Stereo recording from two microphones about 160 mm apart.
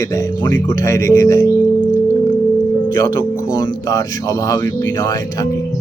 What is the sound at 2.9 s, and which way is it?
Speech, 25° left (ahead or behind).